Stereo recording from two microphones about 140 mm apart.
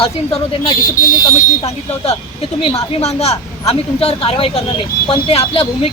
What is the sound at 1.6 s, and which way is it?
A man's voice, 50° left (ahead or behind).